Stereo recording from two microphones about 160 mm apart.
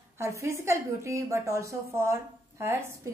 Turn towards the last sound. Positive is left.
turn(degrees=-15)  # may be behind; listen again after turning